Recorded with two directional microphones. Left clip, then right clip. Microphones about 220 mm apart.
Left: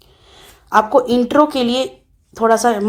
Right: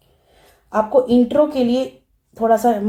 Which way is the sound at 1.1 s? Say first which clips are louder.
Left 2 dB; 20° left (ahead or behind).